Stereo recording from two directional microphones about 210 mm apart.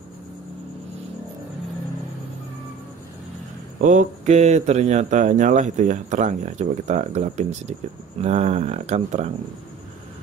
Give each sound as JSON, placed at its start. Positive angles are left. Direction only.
{"t": 3.8, "sound": "speech", "side_deg": -35}